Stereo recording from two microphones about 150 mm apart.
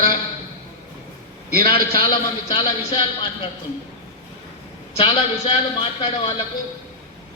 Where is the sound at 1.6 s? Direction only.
30° left (ahead or behind).